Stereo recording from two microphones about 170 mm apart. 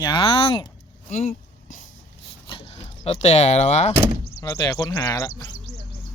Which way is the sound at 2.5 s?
35° left (ahead or behind).